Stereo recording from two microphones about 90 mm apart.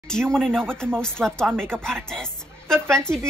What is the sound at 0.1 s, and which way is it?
A woman's voice, 5° left (ahead or behind).